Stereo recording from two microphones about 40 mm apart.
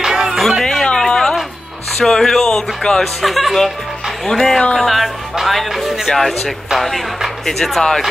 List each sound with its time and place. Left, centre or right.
0.0 s music: centre
0.3 s music: centre
0.8 s a sound: centre
2.0 s speech: centre
3.0 s speech: centre
6.0 s speech: centre